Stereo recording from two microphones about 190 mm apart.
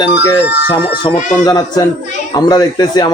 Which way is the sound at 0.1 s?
60° left (ahead or behind).